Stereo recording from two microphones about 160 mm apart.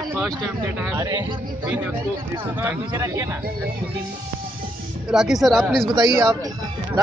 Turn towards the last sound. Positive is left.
turn(degrees=-20)  # may be behind; listen again after turning